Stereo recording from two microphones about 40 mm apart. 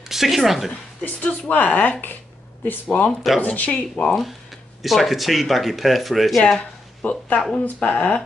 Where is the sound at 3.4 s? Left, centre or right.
Left.